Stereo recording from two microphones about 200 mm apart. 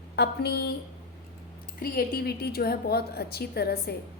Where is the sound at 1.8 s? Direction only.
50° left (ahead or behind).